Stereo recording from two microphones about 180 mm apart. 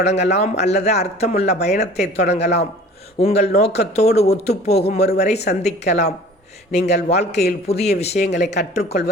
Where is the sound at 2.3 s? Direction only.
65° left (ahead or behind).